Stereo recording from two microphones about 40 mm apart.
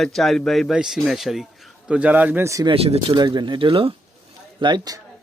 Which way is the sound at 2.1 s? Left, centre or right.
Right.